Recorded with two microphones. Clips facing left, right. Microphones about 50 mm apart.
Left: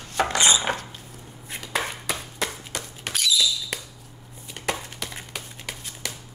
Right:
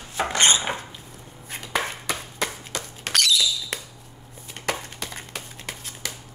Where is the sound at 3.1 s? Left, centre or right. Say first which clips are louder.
Right 2 dB; right.